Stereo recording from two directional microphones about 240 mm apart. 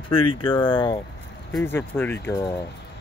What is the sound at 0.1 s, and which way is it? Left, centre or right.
Speech, left.